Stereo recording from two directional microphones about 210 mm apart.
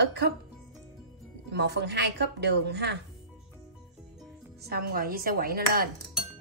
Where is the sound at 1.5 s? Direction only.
55° right (ahead or behind).